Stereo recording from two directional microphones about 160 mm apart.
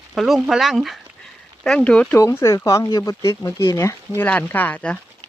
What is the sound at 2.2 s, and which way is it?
Speech, 15° left (ahead or behind).